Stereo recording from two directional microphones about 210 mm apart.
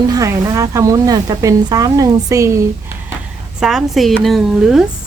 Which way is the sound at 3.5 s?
Centre (ahead or behind).